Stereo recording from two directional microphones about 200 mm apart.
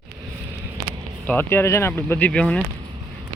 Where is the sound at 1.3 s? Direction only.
10° left (ahead or behind).